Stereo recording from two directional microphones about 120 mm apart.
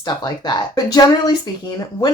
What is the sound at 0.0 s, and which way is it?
Speech, 35° left (ahead or behind).